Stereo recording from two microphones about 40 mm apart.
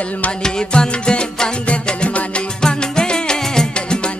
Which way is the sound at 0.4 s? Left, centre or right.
Centre.